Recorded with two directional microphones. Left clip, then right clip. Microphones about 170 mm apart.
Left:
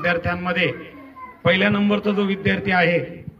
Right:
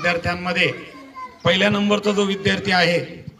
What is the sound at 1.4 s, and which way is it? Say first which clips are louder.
A man's voice: even; 55° right (ahead or behind).